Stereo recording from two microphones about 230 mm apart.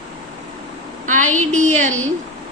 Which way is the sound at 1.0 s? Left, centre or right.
Right.